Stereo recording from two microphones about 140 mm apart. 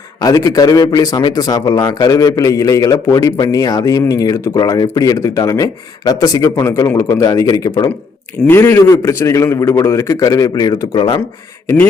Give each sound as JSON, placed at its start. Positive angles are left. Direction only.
{"t": 0.2, "sound": "speech", "side_deg": 25}
{"t": 8.4, "sound": "speech", "side_deg": 15}